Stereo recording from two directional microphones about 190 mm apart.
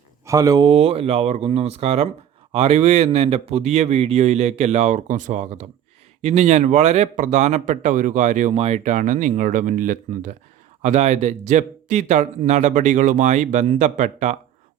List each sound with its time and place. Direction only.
0.3 s speech: 20° right (ahead or behind); by 14.3 s 40° right (ahead or behind)